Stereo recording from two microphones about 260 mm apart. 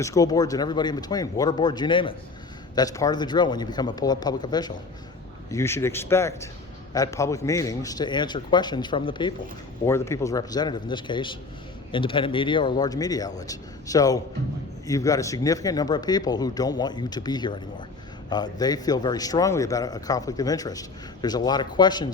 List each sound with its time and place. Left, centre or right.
0.0 s a man's voice: centre